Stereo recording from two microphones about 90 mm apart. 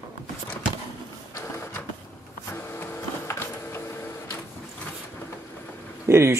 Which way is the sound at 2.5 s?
25° left (ahead or behind).